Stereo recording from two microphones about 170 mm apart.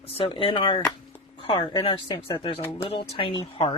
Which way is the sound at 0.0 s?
35° left (ahead or behind).